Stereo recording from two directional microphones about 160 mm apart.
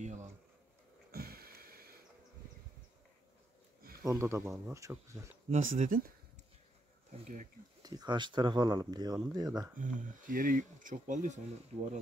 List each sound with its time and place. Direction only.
0.0 s a sound: 45° right (ahead or behind)
1.1 s a sound: 70° right (ahead or behind)
4.0 s speech: 20° right (ahead or behind)
5.5 s speech: 45° right (ahead or behind)
7.1 s speech: 50° right (ahead or behind)
7.8 s speech: 25° right (ahead or behind)
9.8 s speech: 55° right (ahead or behind)